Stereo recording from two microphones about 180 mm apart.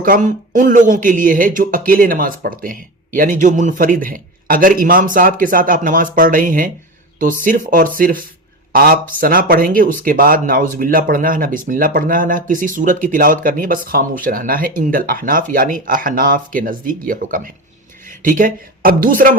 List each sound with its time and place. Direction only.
0.0 s speech: 45° right (ahead or behind)